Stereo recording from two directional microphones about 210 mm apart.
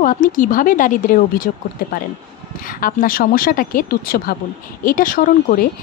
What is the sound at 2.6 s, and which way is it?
Speech, 40° left (ahead or behind).